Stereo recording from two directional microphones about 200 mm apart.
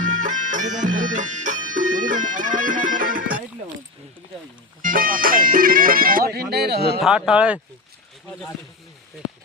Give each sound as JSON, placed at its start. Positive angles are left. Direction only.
{"t": 0.0, "sound": "music", "side_deg": -40}
{"t": 4.8, "sound": "bagpipes", "side_deg": -45}
{"t": 7.0, "sound": "speech", "side_deg": -5}